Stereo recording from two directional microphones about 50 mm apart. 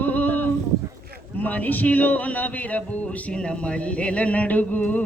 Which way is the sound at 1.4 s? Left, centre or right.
Left.